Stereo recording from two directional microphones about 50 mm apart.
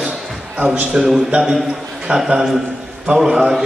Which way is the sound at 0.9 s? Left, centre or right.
Centre.